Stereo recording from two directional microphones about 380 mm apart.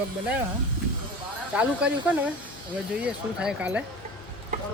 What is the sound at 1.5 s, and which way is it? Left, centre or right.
Speech, centre.